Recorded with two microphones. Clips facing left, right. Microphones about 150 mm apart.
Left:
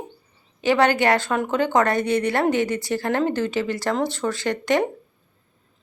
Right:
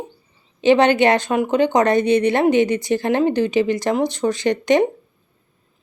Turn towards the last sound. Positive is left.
turn(degrees=-20)  # may be behind; listen again after turning